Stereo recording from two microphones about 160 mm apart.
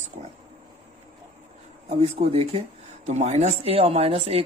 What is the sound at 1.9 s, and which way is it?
Speech, 35° right (ahead or behind).